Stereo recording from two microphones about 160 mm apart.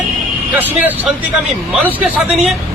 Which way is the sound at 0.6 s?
10° right (ahead or behind).